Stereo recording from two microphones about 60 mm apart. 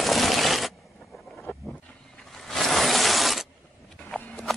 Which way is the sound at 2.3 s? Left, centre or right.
Centre.